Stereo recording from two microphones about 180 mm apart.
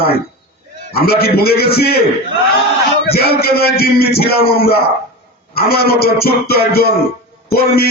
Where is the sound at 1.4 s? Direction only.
60° left (ahead or behind).